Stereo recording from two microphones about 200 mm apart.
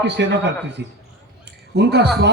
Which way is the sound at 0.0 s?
60° right (ahead or behind).